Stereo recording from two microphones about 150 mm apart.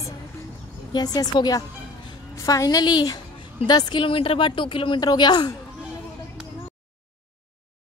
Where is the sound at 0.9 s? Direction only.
25° left (ahead or behind).